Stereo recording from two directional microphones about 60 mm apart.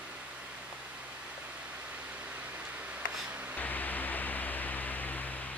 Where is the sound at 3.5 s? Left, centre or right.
Left.